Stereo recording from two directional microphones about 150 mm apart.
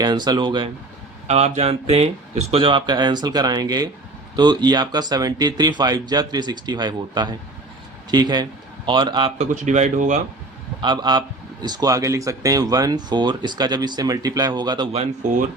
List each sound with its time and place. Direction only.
0.0 s speech: 30° right (ahead or behind)
1.3 s speech: 45° right (ahead or behind)
9.4 s speech: 50° right (ahead or behind)
10.8 s a man's voice: 30° right (ahead or behind)
15.2 s speech: 60° right (ahead or behind)